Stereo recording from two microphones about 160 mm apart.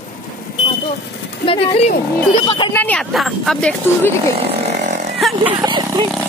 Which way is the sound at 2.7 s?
10° left (ahead or behind).